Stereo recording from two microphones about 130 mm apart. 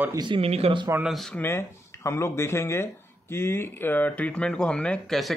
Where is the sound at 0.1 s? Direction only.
35° right (ahead or behind).